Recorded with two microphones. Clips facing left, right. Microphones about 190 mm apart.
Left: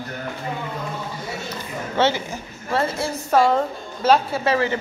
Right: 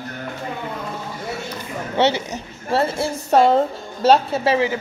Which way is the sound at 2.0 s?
20° right (ahead or behind).